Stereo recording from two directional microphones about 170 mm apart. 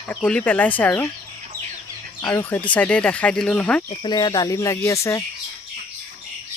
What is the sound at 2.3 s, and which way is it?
Speech, 10° left (ahead or behind).